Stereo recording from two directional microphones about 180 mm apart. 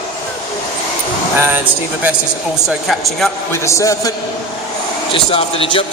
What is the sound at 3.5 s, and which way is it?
Speech, 15° left (ahead or behind).